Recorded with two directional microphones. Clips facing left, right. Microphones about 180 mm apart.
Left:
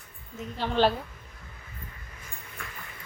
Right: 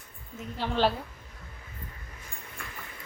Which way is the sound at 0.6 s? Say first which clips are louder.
Left 2 dB; 5° right (ahead or behind).